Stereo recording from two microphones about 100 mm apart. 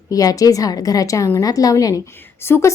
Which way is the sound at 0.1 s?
35° left (ahead or behind).